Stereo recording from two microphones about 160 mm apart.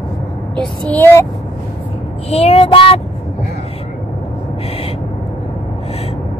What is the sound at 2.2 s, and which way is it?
Child singing, 40° left (ahead or behind).